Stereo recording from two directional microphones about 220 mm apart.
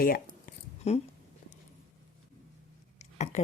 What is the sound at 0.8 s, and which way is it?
Speech, 30° left (ahead or behind).